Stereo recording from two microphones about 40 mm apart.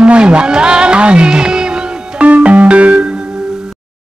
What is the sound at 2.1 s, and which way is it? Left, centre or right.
Music, right.